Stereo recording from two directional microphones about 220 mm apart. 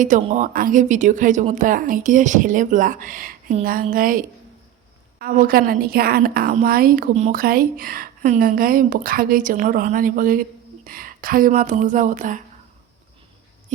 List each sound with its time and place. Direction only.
0.0 s a woman's voice: 35° right (ahead or behind)